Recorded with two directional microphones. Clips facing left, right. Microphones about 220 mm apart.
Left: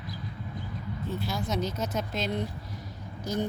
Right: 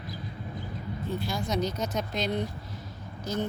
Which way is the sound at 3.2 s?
15° left (ahead or behind).